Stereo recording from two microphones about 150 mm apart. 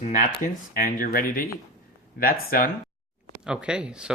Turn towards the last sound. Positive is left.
turn(degrees=-5)  # may be behind; listen again after turning